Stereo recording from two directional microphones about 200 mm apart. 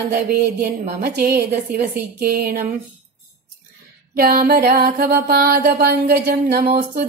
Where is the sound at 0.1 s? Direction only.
45° right (ahead or behind).